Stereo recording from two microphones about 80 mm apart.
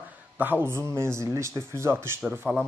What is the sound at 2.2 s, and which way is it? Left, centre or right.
Speech, centre.